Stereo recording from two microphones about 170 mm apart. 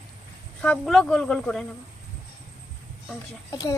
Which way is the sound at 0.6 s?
5° left (ahead or behind).